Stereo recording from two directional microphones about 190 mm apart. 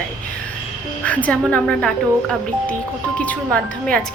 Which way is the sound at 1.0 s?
5° left (ahead or behind).